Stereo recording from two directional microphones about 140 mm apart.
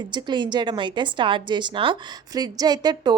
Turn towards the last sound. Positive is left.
turn(degrees=-30)  # may be behind; listen again after turning